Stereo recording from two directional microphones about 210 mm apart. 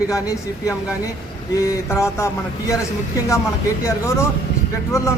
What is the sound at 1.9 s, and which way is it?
Speech, 15° left (ahead or behind).